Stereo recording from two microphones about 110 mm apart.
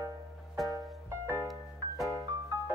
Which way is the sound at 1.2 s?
25° right (ahead or behind).